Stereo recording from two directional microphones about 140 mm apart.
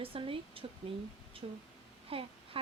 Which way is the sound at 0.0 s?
40° right (ahead or behind).